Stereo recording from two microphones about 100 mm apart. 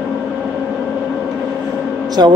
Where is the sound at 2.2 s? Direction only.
40° right (ahead or behind).